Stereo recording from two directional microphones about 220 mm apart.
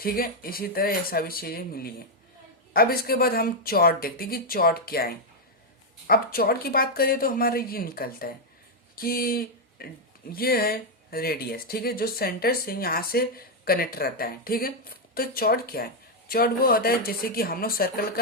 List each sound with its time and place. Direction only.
0.0 s speech: 40° left (ahead or behind)